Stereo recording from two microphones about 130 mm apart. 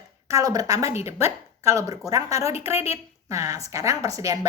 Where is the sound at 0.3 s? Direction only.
25° right (ahead or behind).